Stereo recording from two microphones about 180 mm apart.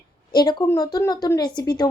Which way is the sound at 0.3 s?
20° left (ahead or behind).